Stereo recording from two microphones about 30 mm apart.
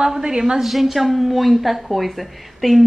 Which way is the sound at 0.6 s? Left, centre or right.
Centre.